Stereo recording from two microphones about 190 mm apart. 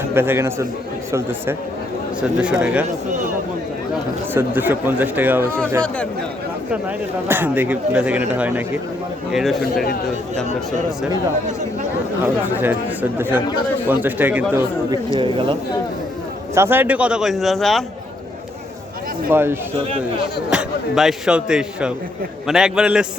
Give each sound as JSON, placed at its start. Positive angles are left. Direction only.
{"t": 0.1, "sound": "a man's voice", "side_deg": -10}
{"t": 4.4, "sound": "speech", "side_deg": -10}
{"t": 7.3, "sound": "a man's voice", "side_deg": -10}
{"t": 12.5, "sound": "speech", "side_deg": -10}
{"t": 15.2, "sound": "speech", "side_deg": -25}
{"t": 16.6, "sound": "a man's voice", "side_deg": -10}
{"t": 19.3, "sound": "a man's voice", "side_deg": -10}